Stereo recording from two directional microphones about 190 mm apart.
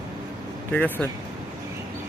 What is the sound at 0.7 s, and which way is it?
Speech, 10° left (ahead or behind).